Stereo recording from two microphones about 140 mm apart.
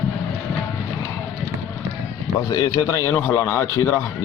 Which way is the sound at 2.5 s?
25° left (ahead or behind).